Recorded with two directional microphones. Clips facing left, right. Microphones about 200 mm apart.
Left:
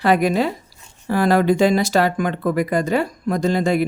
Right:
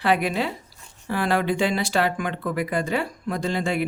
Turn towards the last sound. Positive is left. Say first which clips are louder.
# left 7 dB
turn(degrees=40)  # may be behind; listen again after turning